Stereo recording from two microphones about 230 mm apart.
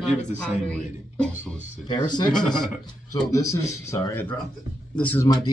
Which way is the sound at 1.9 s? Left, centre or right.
Centre.